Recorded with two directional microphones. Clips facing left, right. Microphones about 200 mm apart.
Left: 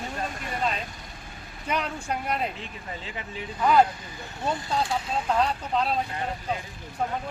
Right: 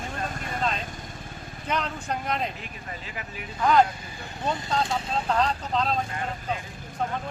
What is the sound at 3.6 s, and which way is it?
Speech, 5° left (ahead or behind).